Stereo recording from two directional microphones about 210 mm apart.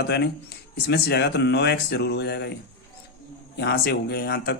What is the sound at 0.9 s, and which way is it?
Speech, 50° left (ahead or behind).